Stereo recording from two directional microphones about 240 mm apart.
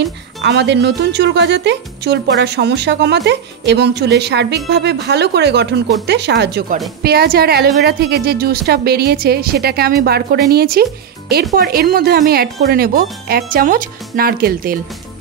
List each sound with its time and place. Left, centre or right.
0.0 s speech: right